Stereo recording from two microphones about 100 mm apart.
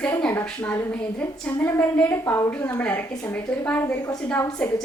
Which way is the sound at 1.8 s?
15° left (ahead or behind).